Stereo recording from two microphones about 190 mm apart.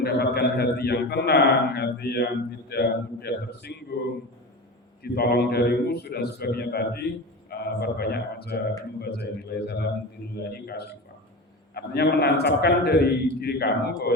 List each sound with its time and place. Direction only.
0.0 s a man's voice: 55° left (ahead or behind)